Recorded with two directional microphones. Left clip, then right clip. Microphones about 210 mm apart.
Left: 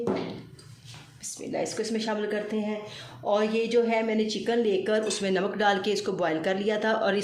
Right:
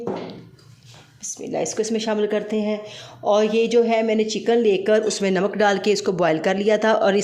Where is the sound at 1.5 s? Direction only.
40° right (ahead or behind).